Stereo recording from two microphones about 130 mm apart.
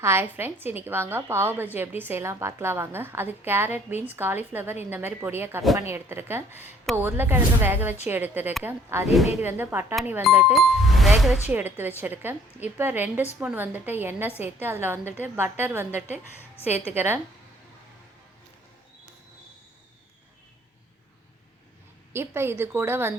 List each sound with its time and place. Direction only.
0.0 s a woman's voice: 20° right (ahead or behind)
10.5 s speech: centre (ahead or behind)
11.4 s a woman's voice: 15° right (ahead or behind)
22.1 s a woman's voice: 20° right (ahead or behind)